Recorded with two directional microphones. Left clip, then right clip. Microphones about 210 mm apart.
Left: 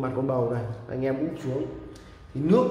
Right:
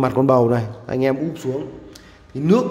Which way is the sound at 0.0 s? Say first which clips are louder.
Right 11 dB; 50° right (ahead or behind).